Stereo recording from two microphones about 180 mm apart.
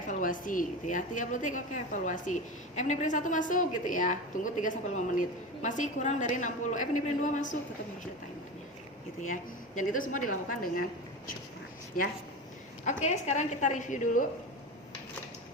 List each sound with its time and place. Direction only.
0.1 s a woman's voice: 45° left (ahead or behind)
9.2 s a woman's voice: 45° left (ahead or behind)
11.9 s a woman's voice: 50° left (ahead or behind)